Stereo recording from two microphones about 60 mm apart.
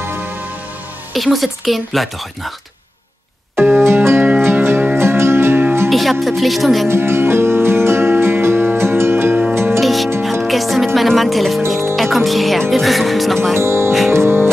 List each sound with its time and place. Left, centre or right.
0.0 s music: right
1.1 s speech: centre
3.8 s music: right
5.9 s music: centre
6.2 s speech: centre
6.9 s music: right
9.8 s music: centre
11.0 s speech: centre
13.6 s speech: right
14.1 s music: right